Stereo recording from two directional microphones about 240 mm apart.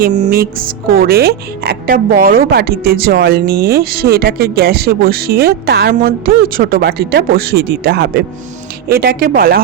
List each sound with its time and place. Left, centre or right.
0.0 s a woman's voice: right